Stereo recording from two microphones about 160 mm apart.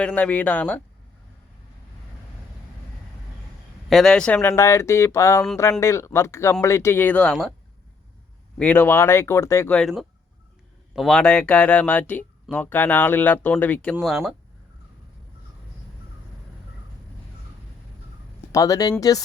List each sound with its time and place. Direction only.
0.0 s speech: 10° left (ahead or behind)
3.8 s speech: centre (ahead or behind)
8.5 s speech: 10° left (ahead or behind)
9.7 s speech: centre (ahead or behind)
14.0 s speech: 5° right (ahead or behind)
18.5 s speech: 20° left (ahead or behind)